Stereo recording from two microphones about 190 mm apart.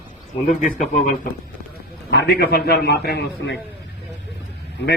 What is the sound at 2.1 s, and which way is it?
A man's voice, 60° left (ahead or behind).